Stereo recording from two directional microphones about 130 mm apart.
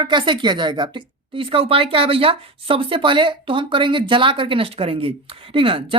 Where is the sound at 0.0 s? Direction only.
35° right (ahead or behind).